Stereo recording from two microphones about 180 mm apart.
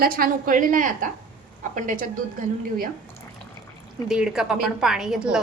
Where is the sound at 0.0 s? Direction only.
55° right (ahead or behind).